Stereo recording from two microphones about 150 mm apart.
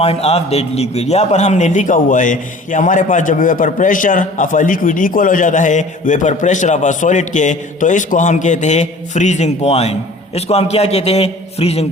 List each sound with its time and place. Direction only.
0.0 s a man's voice: 45° left (ahead or behind)